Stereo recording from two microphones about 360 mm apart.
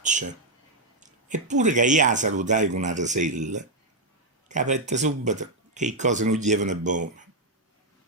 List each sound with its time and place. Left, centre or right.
0.0 s speech: centre